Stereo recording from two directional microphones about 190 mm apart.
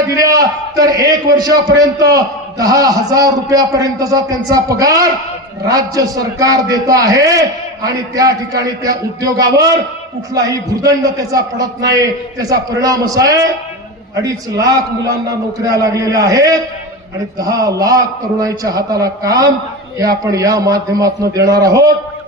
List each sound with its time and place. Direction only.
0.0 s a man's voice: 15° right (ahead or behind)